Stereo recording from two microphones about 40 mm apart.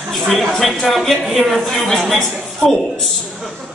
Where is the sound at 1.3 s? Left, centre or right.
Centre.